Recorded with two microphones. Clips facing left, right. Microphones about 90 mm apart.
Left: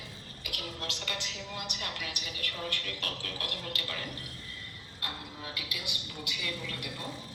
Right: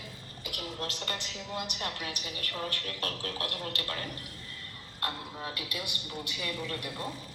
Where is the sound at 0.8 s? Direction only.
40° right (ahead or behind).